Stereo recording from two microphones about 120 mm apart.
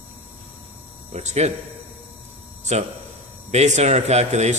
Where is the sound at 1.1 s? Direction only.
70° right (ahead or behind).